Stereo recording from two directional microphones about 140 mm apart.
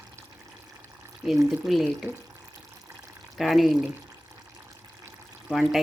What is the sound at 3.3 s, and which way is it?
Speech, centre (ahead or behind).